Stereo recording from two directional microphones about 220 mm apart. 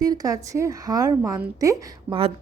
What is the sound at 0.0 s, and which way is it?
A woman's voice, 15° right (ahead or behind).